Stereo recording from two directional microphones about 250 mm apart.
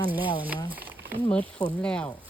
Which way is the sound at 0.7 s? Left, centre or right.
Centre.